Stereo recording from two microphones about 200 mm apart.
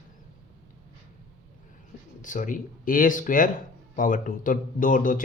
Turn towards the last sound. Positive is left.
turn(degrees=45)  # may be behind; listen again after turning